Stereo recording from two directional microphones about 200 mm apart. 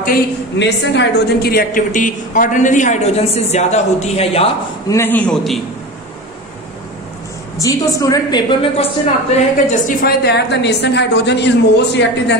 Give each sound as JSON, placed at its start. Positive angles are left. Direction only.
{"t": 0.6, "sound": "a woman's voice", "side_deg": 60}
{"t": 4.8, "sound": "a man's voice", "side_deg": 10}
{"t": 7.5, "sound": "a woman's voice", "side_deg": 15}
{"t": 10.0, "sound": "a woman's voice", "side_deg": 55}